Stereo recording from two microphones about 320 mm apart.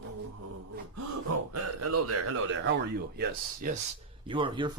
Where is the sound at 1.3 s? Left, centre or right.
Right.